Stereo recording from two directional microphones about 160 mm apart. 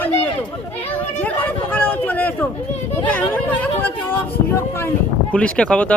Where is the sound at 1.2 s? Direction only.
10° left (ahead or behind).